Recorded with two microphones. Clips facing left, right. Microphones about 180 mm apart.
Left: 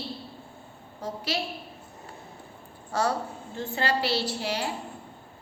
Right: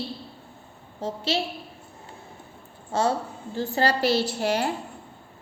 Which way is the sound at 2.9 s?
25° right (ahead or behind).